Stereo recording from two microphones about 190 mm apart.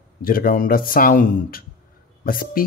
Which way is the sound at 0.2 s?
50° left (ahead or behind).